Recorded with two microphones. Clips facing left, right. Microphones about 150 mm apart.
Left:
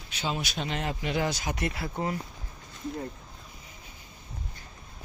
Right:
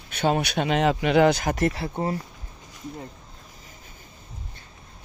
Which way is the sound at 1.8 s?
30° right (ahead or behind).